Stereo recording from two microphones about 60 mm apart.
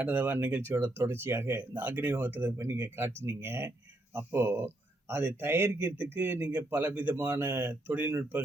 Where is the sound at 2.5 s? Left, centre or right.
Right.